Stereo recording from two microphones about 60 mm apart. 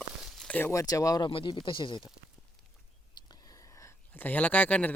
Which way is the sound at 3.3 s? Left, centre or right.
Left.